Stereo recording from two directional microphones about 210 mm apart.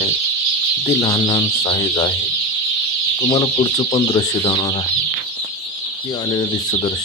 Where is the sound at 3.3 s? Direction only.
20° left (ahead or behind).